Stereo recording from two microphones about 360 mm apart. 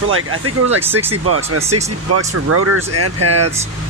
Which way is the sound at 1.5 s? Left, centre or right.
Right.